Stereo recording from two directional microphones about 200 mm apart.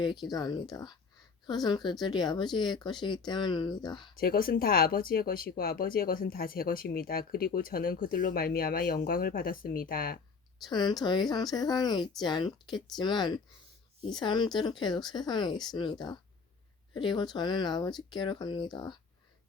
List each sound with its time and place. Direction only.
0.0 s speech: 20° left (ahead or behind)
4.2 s speech: 45° left (ahead or behind)
10.7 s speech: 20° left (ahead or behind)